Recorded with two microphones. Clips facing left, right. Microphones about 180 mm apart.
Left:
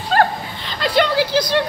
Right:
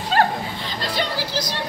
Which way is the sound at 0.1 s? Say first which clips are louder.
Left 3 dB; 45° left (ahead or behind).